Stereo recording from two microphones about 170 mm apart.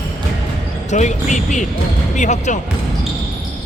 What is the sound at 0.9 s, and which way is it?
Speech, 45° left (ahead or behind).